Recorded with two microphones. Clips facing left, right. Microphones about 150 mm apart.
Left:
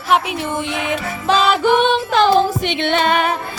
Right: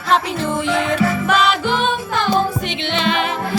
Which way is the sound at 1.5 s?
55° left (ahead or behind).